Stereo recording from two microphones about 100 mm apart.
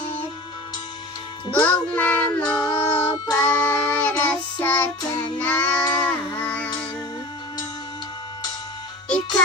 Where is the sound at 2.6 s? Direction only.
45° left (ahead or behind).